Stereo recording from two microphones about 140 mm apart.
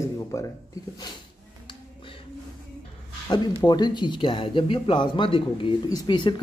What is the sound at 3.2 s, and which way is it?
Speech, 30° left (ahead or behind).